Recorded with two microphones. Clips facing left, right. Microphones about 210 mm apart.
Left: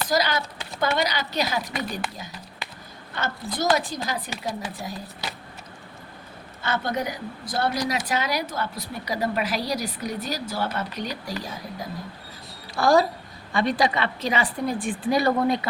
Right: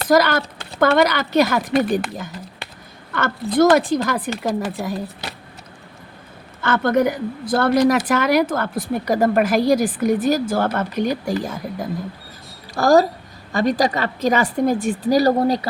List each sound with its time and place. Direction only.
0.0 s speech: 55° right (ahead or behind)
6.6 s a woman's voice: 50° right (ahead or behind)